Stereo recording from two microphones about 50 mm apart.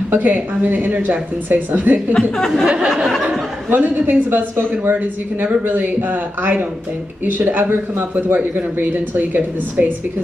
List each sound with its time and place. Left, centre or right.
0.1 s speech: right
2.1 s speech: centre
3.7 s speech: right